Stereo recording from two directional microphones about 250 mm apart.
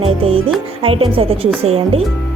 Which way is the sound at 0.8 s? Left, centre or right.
Right.